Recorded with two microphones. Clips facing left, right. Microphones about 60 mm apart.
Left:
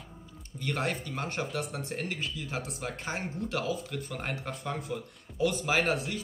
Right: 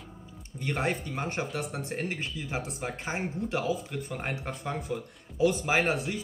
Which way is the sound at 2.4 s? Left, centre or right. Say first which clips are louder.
Right 2 dB; centre.